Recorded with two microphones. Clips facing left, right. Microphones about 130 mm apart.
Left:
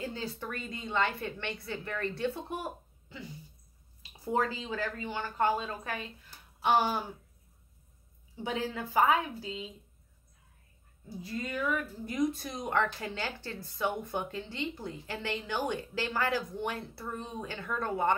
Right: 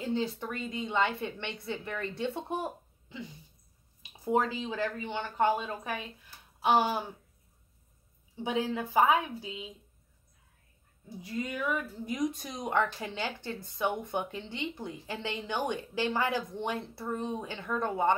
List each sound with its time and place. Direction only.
0.0 s a woman's voice: 20° right (ahead or behind)
8.5 s a woman's voice: 15° right (ahead or behind)
11.1 s a woman's voice: 20° right (ahead or behind)